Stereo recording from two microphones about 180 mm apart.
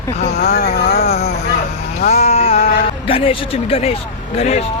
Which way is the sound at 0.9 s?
40° left (ahead or behind).